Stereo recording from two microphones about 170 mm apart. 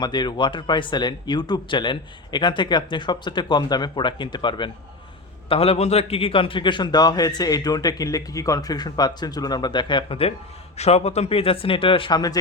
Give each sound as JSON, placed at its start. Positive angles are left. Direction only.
{"t": 0.0, "sound": "a man's voice", "side_deg": 25}